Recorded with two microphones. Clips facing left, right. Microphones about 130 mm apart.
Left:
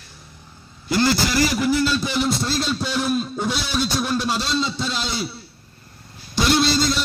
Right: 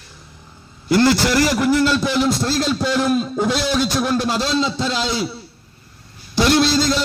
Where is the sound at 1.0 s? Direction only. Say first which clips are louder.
Right 3 dB; 85° right.